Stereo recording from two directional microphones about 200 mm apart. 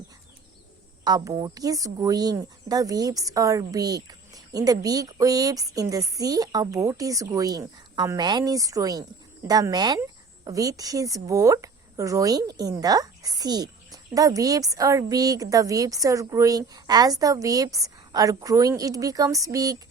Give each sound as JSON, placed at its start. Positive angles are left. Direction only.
{"t": 1.0, "sound": "speech", "side_deg": -20}